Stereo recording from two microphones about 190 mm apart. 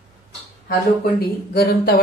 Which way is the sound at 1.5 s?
55° left (ahead or behind).